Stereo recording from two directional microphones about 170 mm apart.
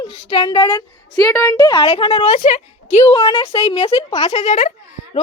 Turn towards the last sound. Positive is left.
turn(degrees=45)  # may be behind; listen again after turning